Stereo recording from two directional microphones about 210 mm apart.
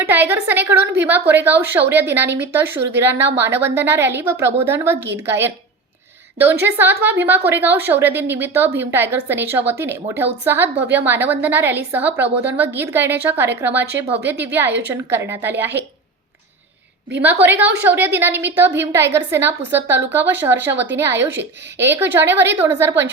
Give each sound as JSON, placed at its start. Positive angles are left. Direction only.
{"t": 0.0, "sound": "a woman's voice", "side_deg": -10}
{"t": 17.4, "sound": "a woman's voice", "side_deg": -10}